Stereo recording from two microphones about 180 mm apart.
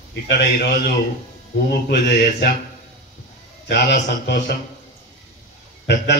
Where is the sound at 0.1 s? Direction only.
70° left (ahead or behind).